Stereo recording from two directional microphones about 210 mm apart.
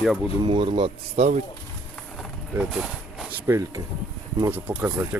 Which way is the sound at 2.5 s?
Centre (ahead or behind).